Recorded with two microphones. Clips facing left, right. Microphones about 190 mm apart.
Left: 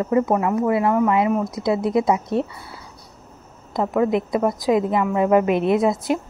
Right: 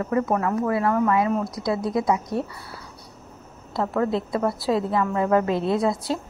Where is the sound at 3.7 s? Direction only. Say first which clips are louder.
Left 4 dB; 15° left (ahead or behind).